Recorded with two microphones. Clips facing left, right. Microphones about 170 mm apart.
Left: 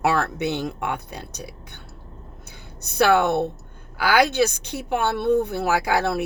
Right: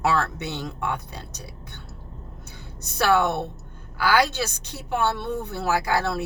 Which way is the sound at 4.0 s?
15° left (ahead or behind).